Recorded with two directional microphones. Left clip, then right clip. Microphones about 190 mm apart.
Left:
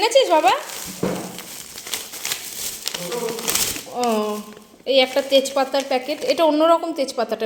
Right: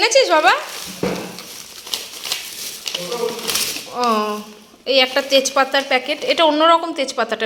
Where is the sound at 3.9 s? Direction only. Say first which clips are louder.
Right 3 dB; 15° left (ahead or behind).